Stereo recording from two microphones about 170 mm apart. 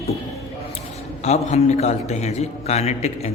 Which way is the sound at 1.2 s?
40° left (ahead or behind).